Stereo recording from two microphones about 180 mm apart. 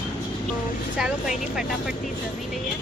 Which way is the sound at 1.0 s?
5° right (ahead or behind).